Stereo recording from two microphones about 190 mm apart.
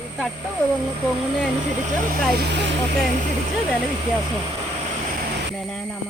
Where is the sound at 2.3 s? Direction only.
60° right (ahead or behind).